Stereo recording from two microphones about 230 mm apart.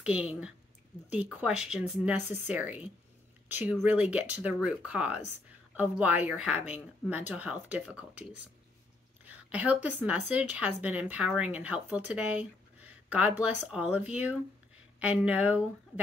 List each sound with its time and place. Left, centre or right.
0.0 s speech: centre
12.1 s a sound: centre
13.4 s speech: centre